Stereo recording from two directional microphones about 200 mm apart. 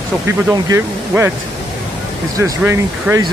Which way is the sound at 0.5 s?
10° right (ahead or behind).